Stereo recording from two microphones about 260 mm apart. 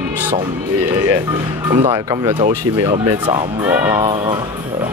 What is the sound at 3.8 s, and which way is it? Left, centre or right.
Speech, centre.